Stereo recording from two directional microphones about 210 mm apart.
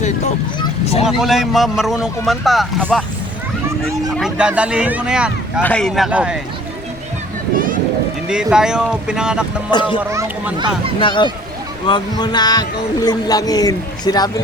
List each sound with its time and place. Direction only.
0.6 s a sound: 30° left (ahead or behind)
1.0 s speech: centre (ahead or behind)
4.2 s speech: 5° right (ahead or behind)
7.5 s vehicle: 40° right (ahead or behind)
8.3 s speech: 5° right (ahead or behind)
11.0 s a man's voice: 20° left (ahead or behind)